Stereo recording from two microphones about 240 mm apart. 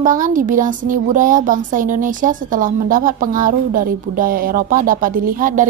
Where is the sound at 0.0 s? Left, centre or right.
Right.